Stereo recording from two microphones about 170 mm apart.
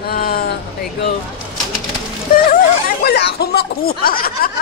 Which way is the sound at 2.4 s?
60° left (ahead or behind).